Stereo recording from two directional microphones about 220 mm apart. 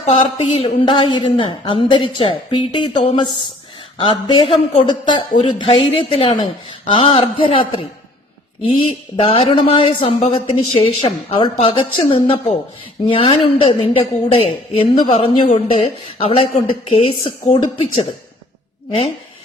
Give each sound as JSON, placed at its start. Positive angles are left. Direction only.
{"t": 0.0, "sound": "speech", "side_deg": 30}